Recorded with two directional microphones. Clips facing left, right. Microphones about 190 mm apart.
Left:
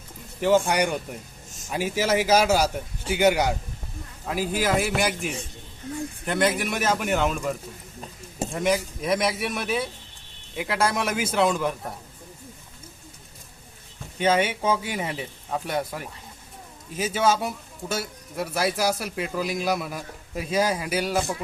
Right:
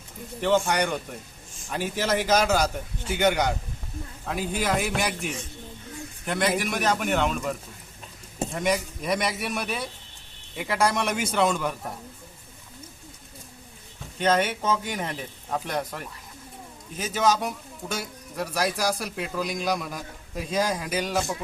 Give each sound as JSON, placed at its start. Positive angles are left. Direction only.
{"t": 0.4, "sound": "speech", "side_deg": 10}
{"t": 1.5, "sound": "a sound", "side_deg": 40}
{"t": 1.7, "sound": "speech", "side_deg": 10}
{"t": 14.2, "sound": "speech", "side_deg": 10}